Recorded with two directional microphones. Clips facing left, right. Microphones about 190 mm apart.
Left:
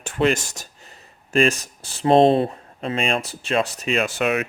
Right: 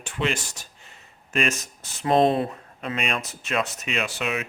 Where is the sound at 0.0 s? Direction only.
45° left (ahead or behind).